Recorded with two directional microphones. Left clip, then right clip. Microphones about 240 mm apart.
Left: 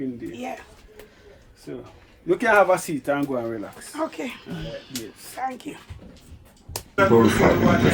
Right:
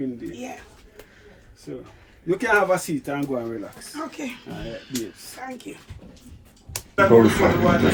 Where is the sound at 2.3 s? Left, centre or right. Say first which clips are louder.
Left 2 dB; left.